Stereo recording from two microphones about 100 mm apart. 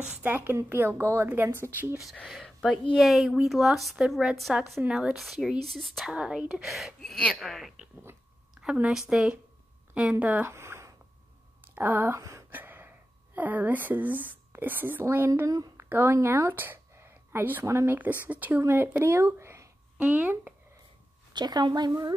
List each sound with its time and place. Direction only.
0.1 s a woman's voice: 20° right (ahead or behind)
2.2 s a woman's voice: 5° left (ahead or behind); by 10.5 s 15° right (ahead or behind)
10.5 s a sound: 25° right (ahead or behind)
11.7 s a woman's voice: 20° right (ahead or behind)
12.2 s a sound: 30° right (ahead or behind)
12.4 s speech: 20° right (ahead or behind)
15.4 s speech: 35° right (ahead or behind)
15.8 s a woman's voice: 25° right (ahead or behind)
20.0 s speech: 15° right (ahead or behind)
21.3 s a woman's voice: 45° right (ahead or behind)